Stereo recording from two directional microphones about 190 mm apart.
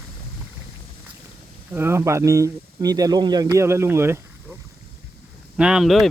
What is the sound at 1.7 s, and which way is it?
Speech, 15° right (ahead or behind).